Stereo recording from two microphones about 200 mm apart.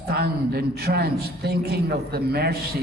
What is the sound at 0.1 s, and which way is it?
A man's voice, 55° right (ahead or behind).